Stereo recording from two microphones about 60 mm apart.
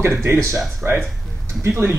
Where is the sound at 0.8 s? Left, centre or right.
Right.